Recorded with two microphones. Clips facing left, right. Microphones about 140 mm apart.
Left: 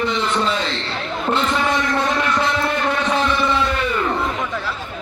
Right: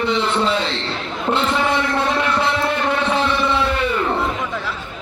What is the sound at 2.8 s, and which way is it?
Music, 25° right (ahead or behind).